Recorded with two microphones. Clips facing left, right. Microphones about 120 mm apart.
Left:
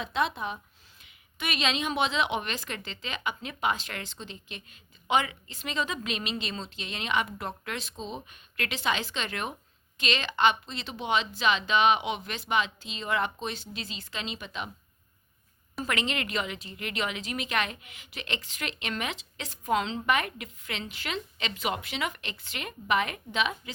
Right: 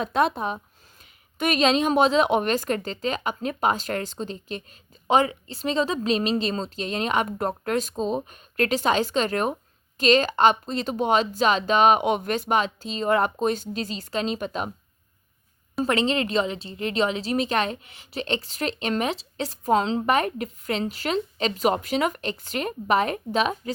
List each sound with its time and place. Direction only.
0.0 s a woman's voice: 45° right (ahead or behind)
15.8 s a woman's voice: 30° right (ahead or behind)